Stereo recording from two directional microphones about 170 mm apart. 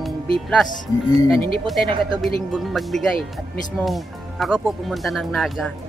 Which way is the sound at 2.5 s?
Centre (ahead or behind).